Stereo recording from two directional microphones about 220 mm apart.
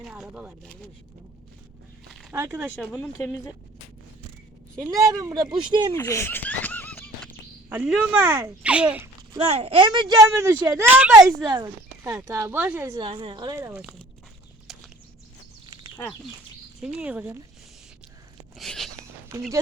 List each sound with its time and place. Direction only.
0.0 s speech: 5° right (ahead or behind)
2.3 s speech: 15° right (ahead or behind)
2.9 s speech: 10° left (ahead or behind)
4.8 s speech: 15° right (ahead or behind)
6.0 s laughter: 10° left (ahead or behind)
7.7 s speech: 5° right (ahead or behind)
9.3 s speech: 25° right (ahead or behind); by 11.4 s 5° right (ahead or behind)
11.4 s speech: 20° right (ahead or behind)
14.7 s a sound: centre (ahead or behind)
16.8 s speech: 5° right (ahead or behind)
18.5 s a sound: centre (ahead or behind)